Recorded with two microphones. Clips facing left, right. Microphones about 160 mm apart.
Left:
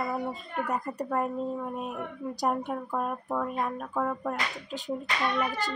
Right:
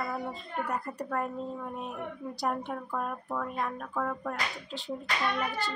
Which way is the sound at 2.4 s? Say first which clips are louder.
Left 3 dB; 15° left (ahead or behind).